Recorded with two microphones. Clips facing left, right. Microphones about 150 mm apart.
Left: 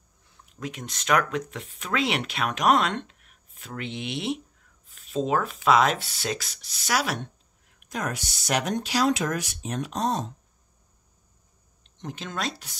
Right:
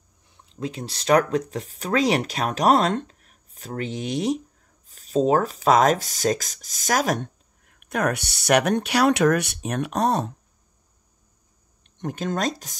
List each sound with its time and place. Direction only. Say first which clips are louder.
0.5 s speech: right 5 dB; 30° right (ahead or behind); by 10.3 s 60° right (ahead or behind)
11.8 s speech: right 8 dB; 50° right (ahead or behind)